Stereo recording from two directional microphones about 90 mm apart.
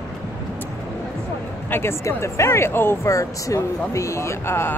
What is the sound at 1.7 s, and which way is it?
Speech, 30° left (ahead or behind).